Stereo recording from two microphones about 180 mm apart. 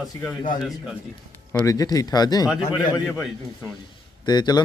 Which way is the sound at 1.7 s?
20° left (ahead or behind).